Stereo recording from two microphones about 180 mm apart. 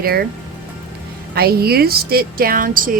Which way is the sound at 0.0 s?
55° right (ahead or behind).